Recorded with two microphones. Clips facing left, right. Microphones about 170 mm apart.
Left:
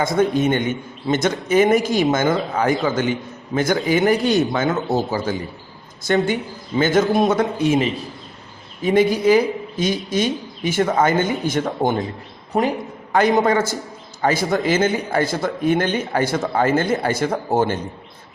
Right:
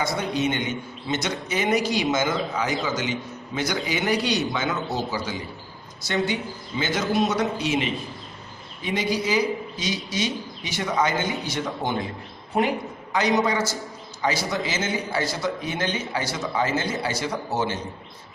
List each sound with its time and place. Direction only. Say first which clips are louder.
0.0 s a man's voice: left 7 dB; 50° left (ahead or behind)
13.1 s a man's voice: left 6 dB; 55° left (ahead or behind)